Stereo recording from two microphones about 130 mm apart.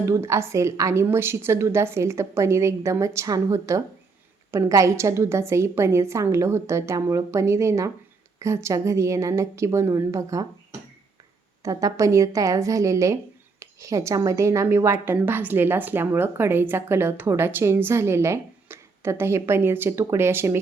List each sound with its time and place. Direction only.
0.0 s a woman's voice: 20° right (ahead or behind)
11.6 s a woman's voice: 25° right (ahead or behind)